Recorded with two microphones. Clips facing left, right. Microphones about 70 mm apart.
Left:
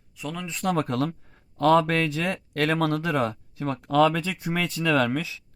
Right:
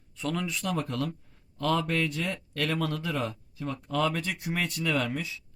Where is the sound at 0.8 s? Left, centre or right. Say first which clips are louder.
Left 6 dB; left.